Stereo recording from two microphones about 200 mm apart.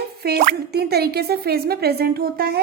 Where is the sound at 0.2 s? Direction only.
50° right (ahead or behind).